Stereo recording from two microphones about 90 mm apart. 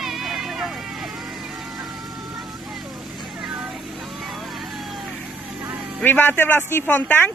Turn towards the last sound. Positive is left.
turn(degrees=20)  # may be behind; listen again after turning